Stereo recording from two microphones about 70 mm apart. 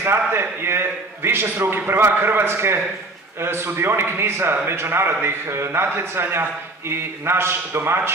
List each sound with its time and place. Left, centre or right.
0.0 s a man's voice: right